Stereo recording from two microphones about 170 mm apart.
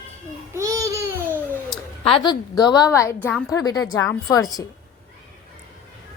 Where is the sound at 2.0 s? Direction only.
30° left (ahead or behind).